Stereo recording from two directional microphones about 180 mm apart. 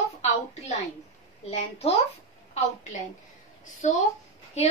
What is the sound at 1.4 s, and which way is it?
Speech, 35° left (ahead or behind).